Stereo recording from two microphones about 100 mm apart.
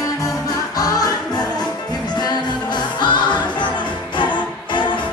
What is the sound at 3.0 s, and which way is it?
Music, 50° left (ahead or behind).